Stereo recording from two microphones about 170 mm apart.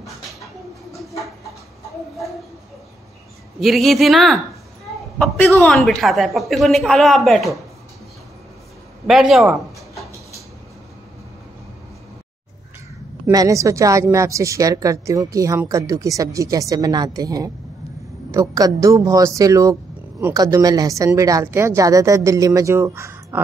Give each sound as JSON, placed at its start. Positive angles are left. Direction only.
{"t": 3.5, "sound": "a woman's voice", "side_deg": 0}
{"t": 5.6, "sound": "a woman's voice", "side_deg": 5}
{"t": 9.0, "sound": "a woman's voice", "side_deg": 0}
{"t": 13.3, "sound": "speech", "side_deg": -20}